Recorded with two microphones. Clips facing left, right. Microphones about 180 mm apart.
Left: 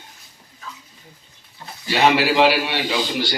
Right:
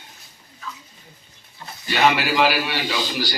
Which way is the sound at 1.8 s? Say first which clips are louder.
Left 2 dB; 30° left (ahead or behind).